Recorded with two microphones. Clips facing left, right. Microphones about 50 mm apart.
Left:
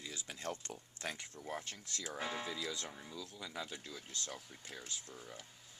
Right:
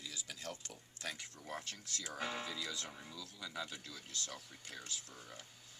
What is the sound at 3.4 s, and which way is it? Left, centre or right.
Speech, centre.